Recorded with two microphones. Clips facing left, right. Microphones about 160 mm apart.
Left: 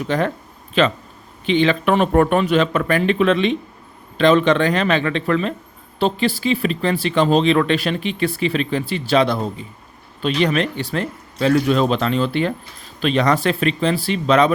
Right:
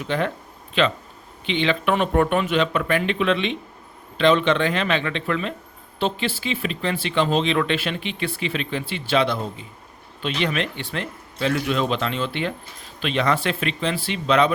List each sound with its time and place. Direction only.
0.1 s speech: 40° left (ahead or behind)